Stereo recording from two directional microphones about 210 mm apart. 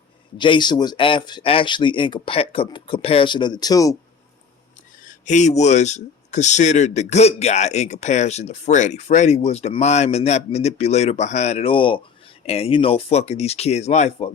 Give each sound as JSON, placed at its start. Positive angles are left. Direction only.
{"t": 0.3, "sound": "speech", "side_deg": 20}
{"t": 5.0, "sound": "speech", "side_deg": 35}